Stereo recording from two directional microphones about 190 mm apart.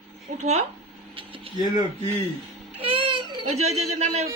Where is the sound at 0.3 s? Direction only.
35° right (ahead or behind).